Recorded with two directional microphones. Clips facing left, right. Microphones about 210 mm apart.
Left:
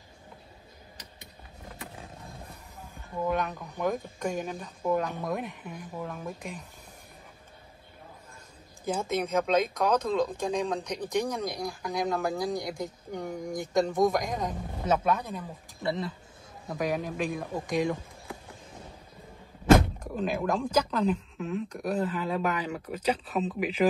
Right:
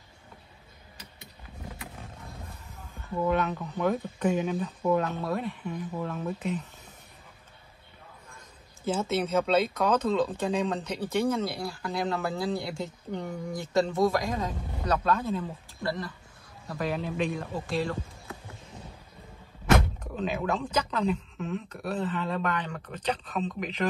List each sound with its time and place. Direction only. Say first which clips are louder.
3.3 s speech: right 2 dB; 10° left (ahead or behind)
5.6 s speech: right 4 dB; 5° left (ahead or behind)
8.8 s speech: right 1 dB; 15° left (ahead or behind)
16.7 s speech: even; 10° left (ahead or behind)
20.2 s speech: left 1 dB; 10° left (ahead or behind)